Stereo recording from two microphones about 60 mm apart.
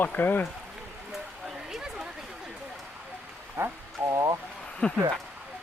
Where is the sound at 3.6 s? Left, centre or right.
Right.